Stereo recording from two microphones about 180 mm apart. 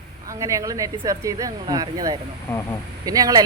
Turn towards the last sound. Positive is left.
turn(degrees=-20)  # may be behind; listen again after turning